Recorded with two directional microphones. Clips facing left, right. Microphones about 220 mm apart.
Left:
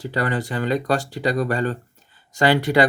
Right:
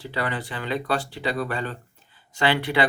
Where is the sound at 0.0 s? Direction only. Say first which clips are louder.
Left 5 dB; 45° left (ahead or behind).